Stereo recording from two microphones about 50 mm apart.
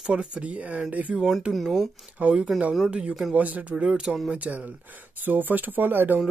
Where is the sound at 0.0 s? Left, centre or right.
Centre.